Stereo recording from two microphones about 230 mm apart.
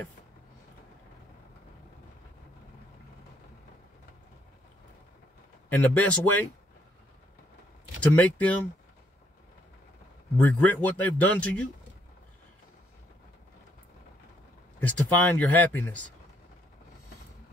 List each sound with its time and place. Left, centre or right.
5.7 s speech: centre
8.1 s speech: centre
10.3 s speech: centre
14.8 s speech: centre